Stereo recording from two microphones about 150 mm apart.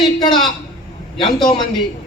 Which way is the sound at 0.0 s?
30° left (ahead or behind).